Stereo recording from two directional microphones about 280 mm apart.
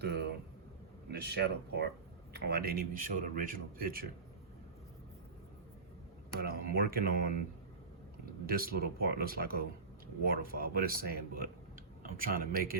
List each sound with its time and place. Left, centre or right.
0.0 s a man's voice: right
6.4 s a man's voice: right
8.4 s a man's voice: right